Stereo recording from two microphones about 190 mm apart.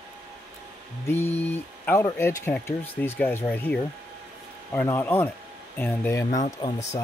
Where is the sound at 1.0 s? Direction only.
15° left (ahead or behind).